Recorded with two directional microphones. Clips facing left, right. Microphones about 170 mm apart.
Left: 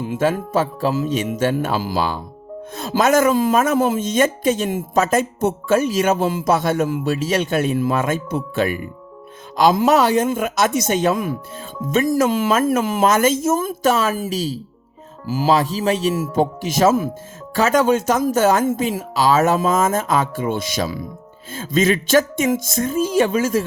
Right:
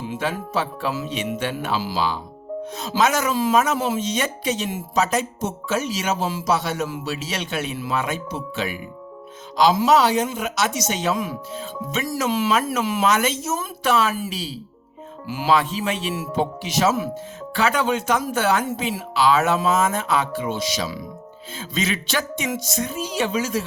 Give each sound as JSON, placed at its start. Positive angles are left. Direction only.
{"t": 0.0, "sound": "speech", "side_deg": 50}